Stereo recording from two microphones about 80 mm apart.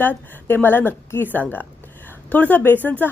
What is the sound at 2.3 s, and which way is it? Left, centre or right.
Speech, centre.